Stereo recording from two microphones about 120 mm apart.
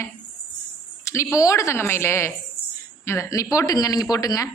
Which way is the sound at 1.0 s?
25° left (ahead or behind).